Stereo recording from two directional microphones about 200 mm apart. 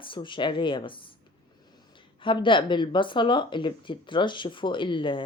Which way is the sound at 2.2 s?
25° left (ahead or behind).